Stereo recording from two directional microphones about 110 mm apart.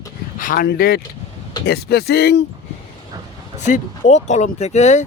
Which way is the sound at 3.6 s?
90° left.